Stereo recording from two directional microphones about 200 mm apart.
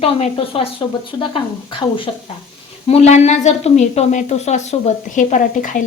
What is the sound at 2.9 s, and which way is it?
A woman's voice, 35° left (ahead or behind).